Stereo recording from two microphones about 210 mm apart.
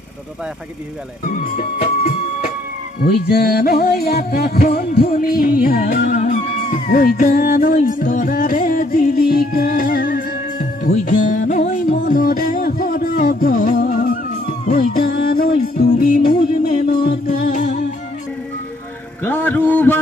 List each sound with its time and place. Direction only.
1.3 s music: 35° left (ahead or behind)
3.0 s music: 45° left (ahead or behind)
19.2 s a man's voice: 10° left (ahead or behind)